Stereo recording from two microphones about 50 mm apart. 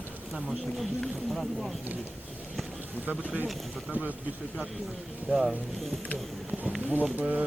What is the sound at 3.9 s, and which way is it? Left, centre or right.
Speech, right.